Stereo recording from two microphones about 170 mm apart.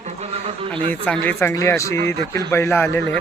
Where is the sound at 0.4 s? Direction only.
35° right (ahead or behind).